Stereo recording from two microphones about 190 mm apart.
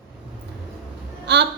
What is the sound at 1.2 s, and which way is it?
Speech, 65° right (ahead or behind).